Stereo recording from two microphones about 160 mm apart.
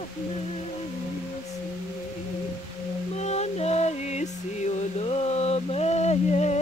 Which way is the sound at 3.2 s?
45° left (ahead or behind).